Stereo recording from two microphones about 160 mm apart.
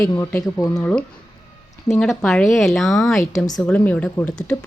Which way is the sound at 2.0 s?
5° left (ahead or behind).